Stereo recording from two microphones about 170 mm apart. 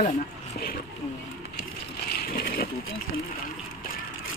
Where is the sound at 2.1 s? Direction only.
65° left (ahead or behind).